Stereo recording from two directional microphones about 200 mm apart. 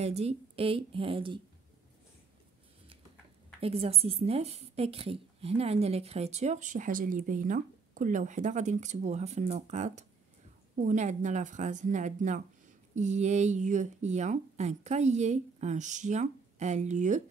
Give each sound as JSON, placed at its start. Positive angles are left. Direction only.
{"t": 0.0, "sound": "a woman's voice", "side_deg": -30}
{"t": 3.6, "sound": "a woman's voice", "side_deg": -30}